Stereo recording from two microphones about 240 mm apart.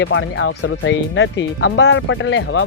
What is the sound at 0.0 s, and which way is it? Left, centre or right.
Speech, left.